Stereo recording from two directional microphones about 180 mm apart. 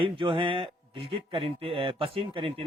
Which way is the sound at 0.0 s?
30° right (ahead or behind).